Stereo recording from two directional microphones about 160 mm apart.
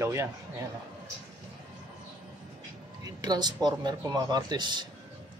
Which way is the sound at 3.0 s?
25° right (ahead or behind).